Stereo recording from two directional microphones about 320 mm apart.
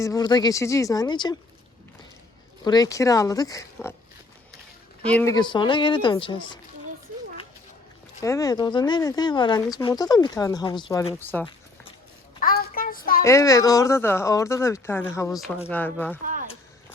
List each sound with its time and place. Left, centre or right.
0.0 s speech: centre
2.6 s speech: centre
5.1 s speech: centre
8.2 s speech: centre
12.4 s child singing: left
13.2 s speech: centre
16.2 s a sound: right